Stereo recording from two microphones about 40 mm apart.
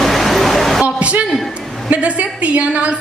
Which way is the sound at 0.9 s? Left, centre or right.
Right.